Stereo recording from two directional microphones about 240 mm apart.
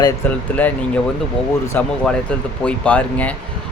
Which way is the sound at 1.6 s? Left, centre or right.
Centre.